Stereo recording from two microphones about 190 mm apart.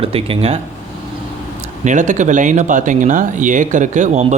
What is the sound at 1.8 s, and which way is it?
Speech, 40° right (ahead or behind).